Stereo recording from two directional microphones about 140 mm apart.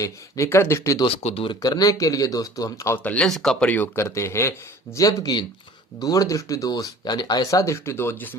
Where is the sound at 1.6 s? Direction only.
25° left (ahead or behind).